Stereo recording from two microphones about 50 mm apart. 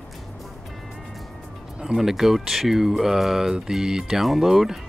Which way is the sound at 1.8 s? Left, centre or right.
Centre.